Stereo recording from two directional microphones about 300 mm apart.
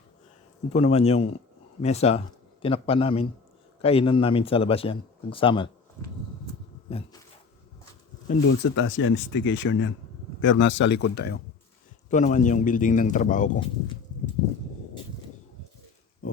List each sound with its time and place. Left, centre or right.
0.7 s a man's voice: left
8.4 s a man's voice: left